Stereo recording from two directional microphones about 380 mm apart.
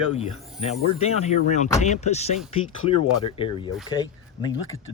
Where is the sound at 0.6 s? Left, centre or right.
Centre.